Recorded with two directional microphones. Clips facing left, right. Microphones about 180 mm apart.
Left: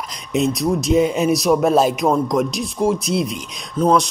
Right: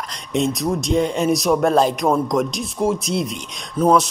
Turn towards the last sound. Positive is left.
turn(degrees=-5)  # may be behind; listen again after turning